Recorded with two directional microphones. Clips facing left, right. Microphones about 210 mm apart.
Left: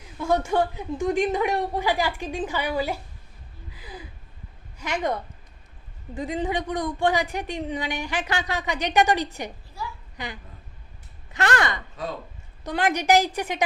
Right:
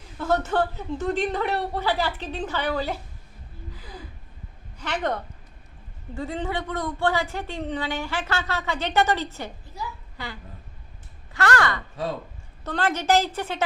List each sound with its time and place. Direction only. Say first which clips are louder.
0.2 s a woman's voice: left 1 dB; 10° left (ahead or behind)
4.8 s a woman's voice: left 1 dB; 10° left (ahead or behind)
11.3 s a sound: right 1 dB; 20° left (ahead or behind)
12.6 s a woman's voice: left 1 dB; 15° left (ahead or behind)